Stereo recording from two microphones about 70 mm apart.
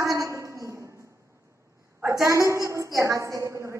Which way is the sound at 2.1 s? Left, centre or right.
Right.